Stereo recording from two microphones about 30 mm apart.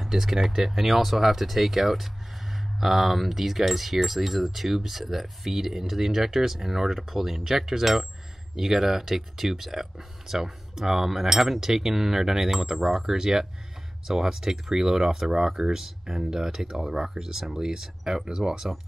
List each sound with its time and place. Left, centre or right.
0.0 s speech: centre